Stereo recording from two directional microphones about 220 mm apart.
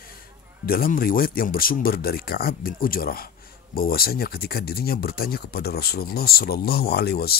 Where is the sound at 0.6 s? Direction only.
40° left (ahead or behind).